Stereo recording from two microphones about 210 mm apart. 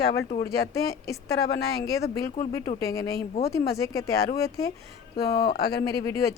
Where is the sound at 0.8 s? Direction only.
15° left (ahead or behind).